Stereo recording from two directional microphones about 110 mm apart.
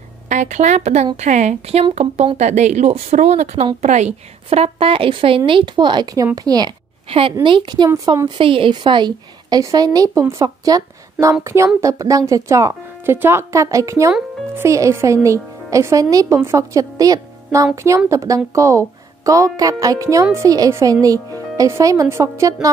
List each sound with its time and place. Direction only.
0.3 s speech: 90° right
3.8 s a woman's voice: 90° right; by 6.7 s 35° right (ahead or behind)
7.1 s a woman's voice: 60° right (ahead or behind)
7.4 s a woman's voice: 45° right (ahead or behind)
8.4 s a woman's voice: 55° right (ahead or behind); by 22.7 s 30° right (ahead or behind)